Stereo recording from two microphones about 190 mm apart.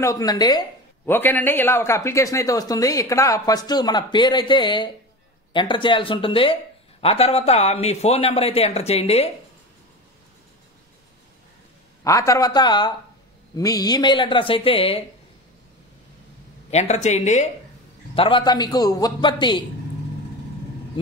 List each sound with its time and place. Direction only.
0.0 s speech: 20° left (ahead or behind)
1.0 s speech: 10° left (ahead or behind); by 9.3 s 35° left (ahead or behind)
12.0 s speech: 15° left (ahead or behind)
16.7 s speech: 35° left (ahead or behind)
18.1 s speech: 25° left (ahead or behind)